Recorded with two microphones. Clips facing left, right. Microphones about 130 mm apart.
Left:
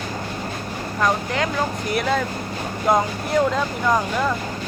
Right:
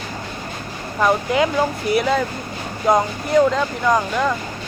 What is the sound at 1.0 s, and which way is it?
Speech, 10° right (ahead or behind).